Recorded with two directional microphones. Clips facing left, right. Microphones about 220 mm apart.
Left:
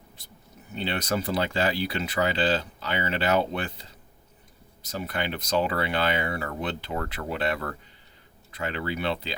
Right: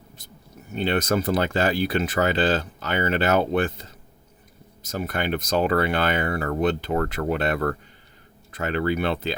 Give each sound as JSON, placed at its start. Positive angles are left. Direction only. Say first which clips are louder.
{"t": 0.7, "sound": "speech", "louder": "right 6 dB", "side_deg": -45}